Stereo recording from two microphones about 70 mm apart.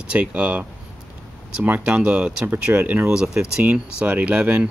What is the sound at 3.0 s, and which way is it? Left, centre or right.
Speech, centre.